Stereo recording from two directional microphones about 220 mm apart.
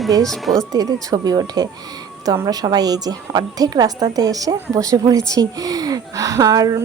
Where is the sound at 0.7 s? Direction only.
15° right (ahead or behind).